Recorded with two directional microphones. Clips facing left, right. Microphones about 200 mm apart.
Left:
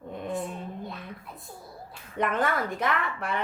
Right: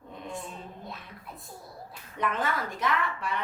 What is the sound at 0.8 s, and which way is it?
Speech, centre (ahead or behind).